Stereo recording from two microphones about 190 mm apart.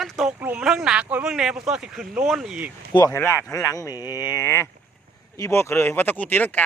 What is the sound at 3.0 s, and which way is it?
Speech, 10° left (ahead or behind).